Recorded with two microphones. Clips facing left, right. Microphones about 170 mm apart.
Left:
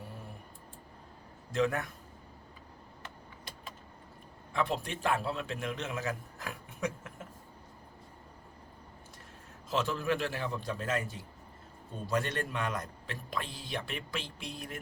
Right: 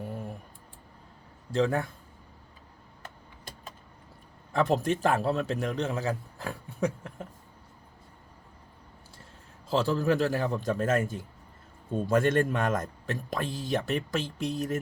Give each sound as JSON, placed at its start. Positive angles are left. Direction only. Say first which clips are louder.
{"t": 1.5, "sound": "a man's voice", "louder": "right 4 dB", "side_deg": -30}
{"t": 3.0, "sound": "vehicle", "louder": "right 3 dB", "side_deg": -45}
{"t": 4.5, "sound": "a man's voice", "louder": "right 8 dB", "side_deg": -40}
{"t": 9.6, "sound": "a man's voice", "louder": "right 6 dB", "side_deg": -35}